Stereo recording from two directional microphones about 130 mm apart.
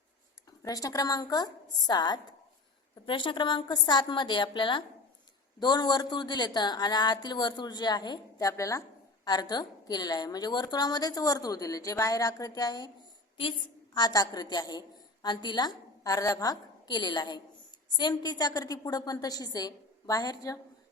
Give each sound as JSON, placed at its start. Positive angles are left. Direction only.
{"t": 0.6, "sound": "a woman's voice", "side_deg": 25}
{"t": 13.9, "sound": "a woman's voice", "side_deg": 30}